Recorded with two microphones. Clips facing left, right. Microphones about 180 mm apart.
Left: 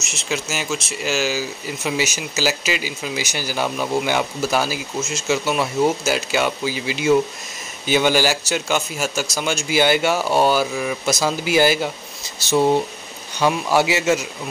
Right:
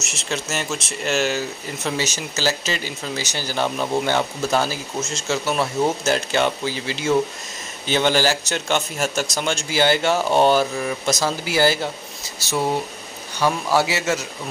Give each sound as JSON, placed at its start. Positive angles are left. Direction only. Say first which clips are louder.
{"t": 0.1, "sound": "speech", "louder": "left 1 dB", "side_deg": 0}
{"t": 13.4, "sound": "speech", "louder": "left 2 dB", "side_deg": 15}